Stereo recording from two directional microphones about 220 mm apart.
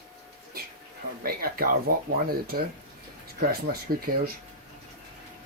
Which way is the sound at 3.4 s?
45° right (ahead or behind).